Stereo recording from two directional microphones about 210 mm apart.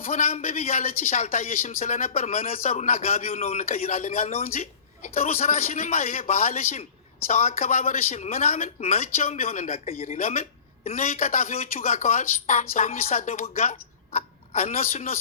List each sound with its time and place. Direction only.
0.0 s speech: 40° left (ahead or behind)